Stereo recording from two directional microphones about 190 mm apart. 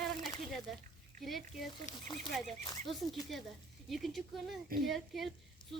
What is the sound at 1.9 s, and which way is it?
Speech, 40° left (ahead or behind).